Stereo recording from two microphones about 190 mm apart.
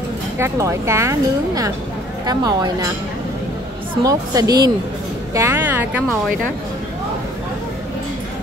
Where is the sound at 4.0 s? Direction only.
20° right (ahead or behind).